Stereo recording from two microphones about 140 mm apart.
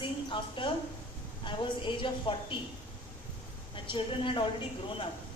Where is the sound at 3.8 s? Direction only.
35° left (ahead or behind).